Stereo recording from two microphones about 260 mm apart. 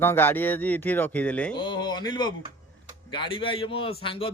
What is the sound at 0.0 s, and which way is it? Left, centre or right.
Speech, centre.